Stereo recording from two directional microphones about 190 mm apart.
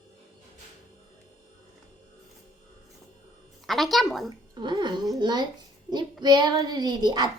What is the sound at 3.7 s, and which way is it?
Speech, centre (ahead or behind).